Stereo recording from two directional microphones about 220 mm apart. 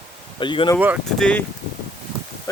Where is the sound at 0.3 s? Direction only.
20° left (ahead or behind).